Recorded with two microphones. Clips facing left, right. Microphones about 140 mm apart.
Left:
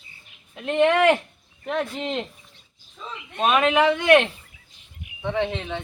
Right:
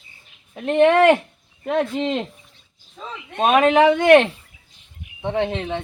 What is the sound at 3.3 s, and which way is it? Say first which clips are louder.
Speech: right 4 dB; 40° right (ahead or behind).